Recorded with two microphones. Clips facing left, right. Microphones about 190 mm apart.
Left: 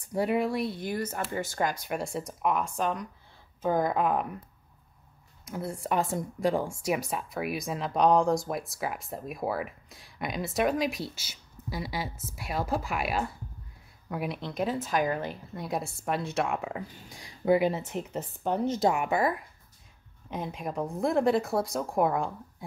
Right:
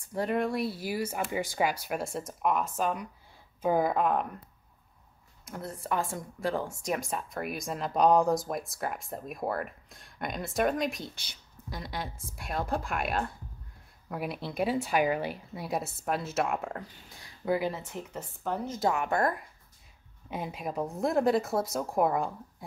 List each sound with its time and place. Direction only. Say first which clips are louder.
0.1 s speech: left 2 dB; 10° left (ahead or behind)
5.4 s speech: left 4 dB; 5° left (ahead or behind)
17.1 s speech: left 5 dB; 15° left (ahead or behind); by 22.3 s centre (ahead or behind)